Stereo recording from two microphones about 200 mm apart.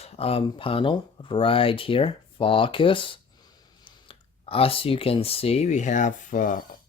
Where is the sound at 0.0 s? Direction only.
30° left (ahead or behind).